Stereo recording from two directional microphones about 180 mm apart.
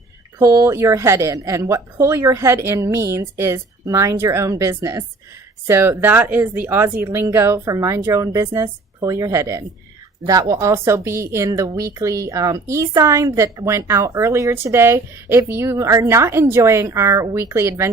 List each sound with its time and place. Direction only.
0.3 s speech: 15° right (ahead or behind)